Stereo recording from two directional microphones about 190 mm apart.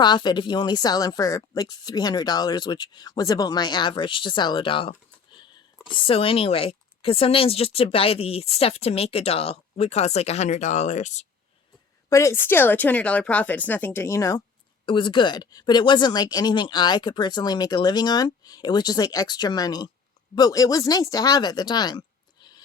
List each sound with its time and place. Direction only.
0.0 s speech: 25° left (ahead or behind)
12.0 s speech: 15° left (ahead or behind)